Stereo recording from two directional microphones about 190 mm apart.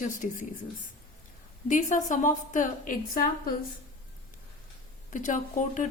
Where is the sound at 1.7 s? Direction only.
40° left (ahead or behind).